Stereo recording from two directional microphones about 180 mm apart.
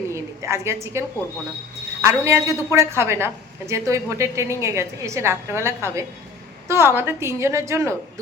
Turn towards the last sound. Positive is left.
turn(degrees=-15)  # may be behind; listen again after turning